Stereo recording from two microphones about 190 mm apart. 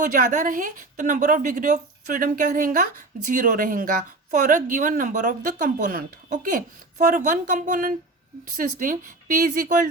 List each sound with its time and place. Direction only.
0.0 s speech: 40° right (ahead or behind)